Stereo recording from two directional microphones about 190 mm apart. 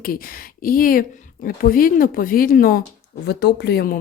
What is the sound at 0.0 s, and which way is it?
Speech, 50° left (ahead or behind).